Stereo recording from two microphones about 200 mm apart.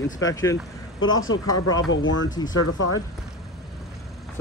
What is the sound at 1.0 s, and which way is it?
Speech, 80° left.